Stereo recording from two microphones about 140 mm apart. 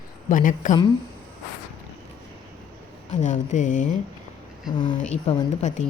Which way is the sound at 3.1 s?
60° left (ahead or behind).